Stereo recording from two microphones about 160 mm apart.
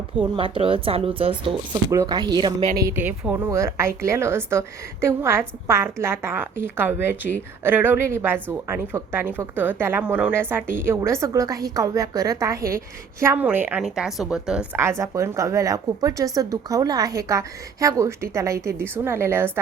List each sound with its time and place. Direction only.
0.3 s a woman's voice: 35° right (ahead or behind)
2.8 s a woman's voice: 15° right (ahead or behind)